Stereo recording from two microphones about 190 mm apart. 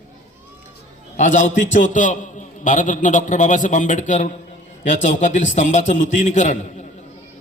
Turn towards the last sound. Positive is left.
turn(degrees=40)  # may be behind; listen again after turning